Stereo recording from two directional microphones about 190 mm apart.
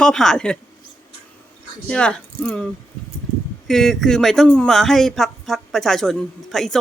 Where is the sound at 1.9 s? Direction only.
5° left (ahead or behind).